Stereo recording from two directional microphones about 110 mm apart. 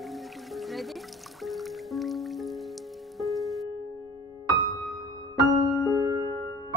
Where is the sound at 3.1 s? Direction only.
Centre (ahead or behind).